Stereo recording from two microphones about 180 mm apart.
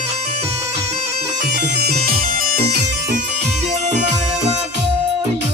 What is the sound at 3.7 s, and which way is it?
Music, 40° right (ahead or behind).